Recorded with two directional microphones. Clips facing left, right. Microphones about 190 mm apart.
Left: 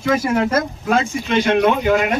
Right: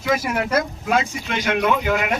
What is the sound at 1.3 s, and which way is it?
Speech, 30° left (ahead or behind).